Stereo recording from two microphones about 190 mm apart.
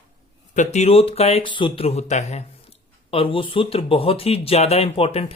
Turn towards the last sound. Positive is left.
turn(degrees=30)  # may be behind; listen again after turning